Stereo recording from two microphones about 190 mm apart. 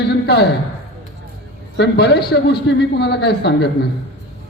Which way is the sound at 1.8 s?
60° left (ahead or behind).